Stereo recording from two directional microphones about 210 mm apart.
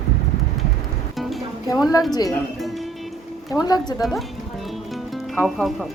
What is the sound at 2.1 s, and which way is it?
Speech, 20° left (ahead or behind).